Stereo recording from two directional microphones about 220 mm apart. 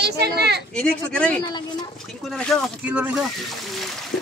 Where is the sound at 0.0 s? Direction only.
50° right (ahead or behind).